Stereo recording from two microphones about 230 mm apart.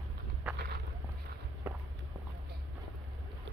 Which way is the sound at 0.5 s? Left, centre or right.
Right.